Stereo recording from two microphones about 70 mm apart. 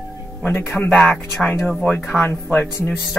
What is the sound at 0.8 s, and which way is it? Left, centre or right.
Speech, centre.